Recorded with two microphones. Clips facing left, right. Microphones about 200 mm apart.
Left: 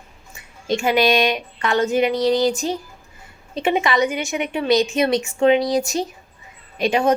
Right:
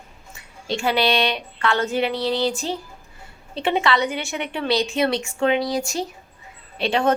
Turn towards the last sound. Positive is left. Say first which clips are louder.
# left 2 dB
turn(degrees=15)  # may be behind; listen again after turning